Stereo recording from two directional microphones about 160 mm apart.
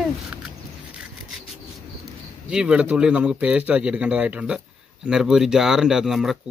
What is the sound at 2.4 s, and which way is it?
A man's voice, 5° right (ahead or behind).